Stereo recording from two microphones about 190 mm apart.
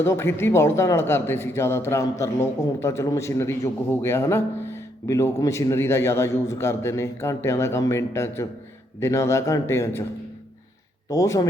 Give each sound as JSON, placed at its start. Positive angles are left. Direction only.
{"t": 0.0, "sound": "speech", "side_deg": 15}
{"t": 11.1, "sound": "speech", "side_deg": 15}